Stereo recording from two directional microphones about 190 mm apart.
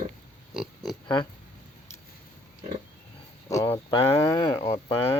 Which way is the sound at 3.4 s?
15° left (ahead or behind).